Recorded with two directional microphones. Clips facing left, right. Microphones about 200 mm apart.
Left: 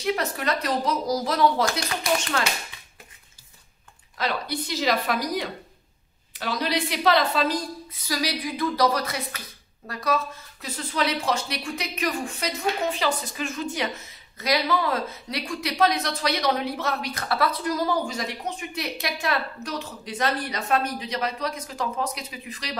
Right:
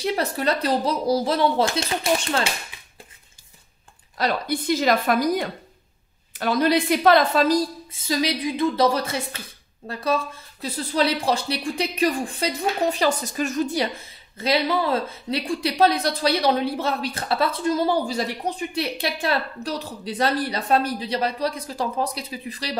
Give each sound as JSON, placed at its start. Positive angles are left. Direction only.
{"t": 0.0, "sound": "a woman's voice", "side_deg": -35}
{"t": 4.2, "sound": "a woman's voice", "side_deg": -50}
{"t": 7.9, "sound": "a woman's voice", "side_deg": -25}
{"t": 13.0, "sound": "a woman's voice", "side_deg": -40}